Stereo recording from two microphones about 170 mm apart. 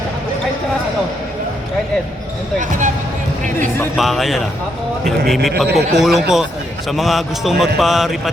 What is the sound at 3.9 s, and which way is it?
A man's voice, centre (ahead or behind).